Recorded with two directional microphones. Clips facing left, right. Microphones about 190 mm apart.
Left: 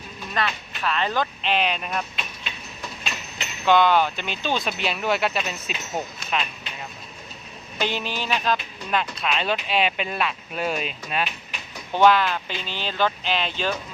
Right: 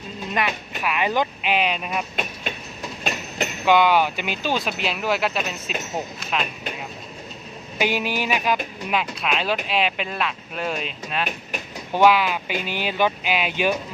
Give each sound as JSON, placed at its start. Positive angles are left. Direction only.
{"t": 0.3, "sound": "speech", "side_deg": -15}
{"t": 2.1, "sound": "vehicle", "side_deg": -50}
{"t": 3.0, "sound": "train", "side_deg": -50}
{"t": 3.7, "sound": "speech", "side_deg": -10}
{"t": 7.8, "sound": "speech", "side_deg": -10}
{"t": 11.9, "sound": "speech", "side_deg": -10}